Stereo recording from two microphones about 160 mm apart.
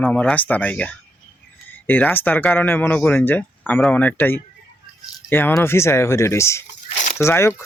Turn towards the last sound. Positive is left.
turn(degrees=15)  # may be behind; listen again after turning